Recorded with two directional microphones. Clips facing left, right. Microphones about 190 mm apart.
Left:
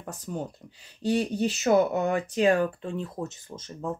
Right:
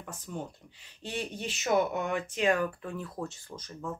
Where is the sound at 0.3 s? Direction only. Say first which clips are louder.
Left 5 dB; 40° left (ahead or behind).